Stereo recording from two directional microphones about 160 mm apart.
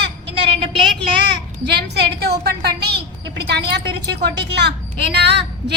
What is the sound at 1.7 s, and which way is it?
A woman's voice, 90° right.